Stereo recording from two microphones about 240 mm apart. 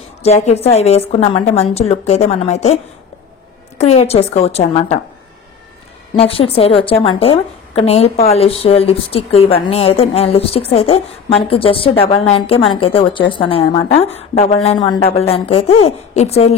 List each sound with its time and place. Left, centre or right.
0.2 s a woman's voice: left
6.1 s a woman's voice: left